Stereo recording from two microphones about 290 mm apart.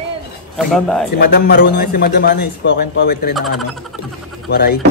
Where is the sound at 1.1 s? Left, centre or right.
Left.